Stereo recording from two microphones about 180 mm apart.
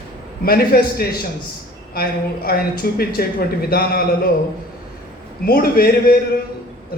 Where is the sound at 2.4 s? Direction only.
55° left (ahead or behind).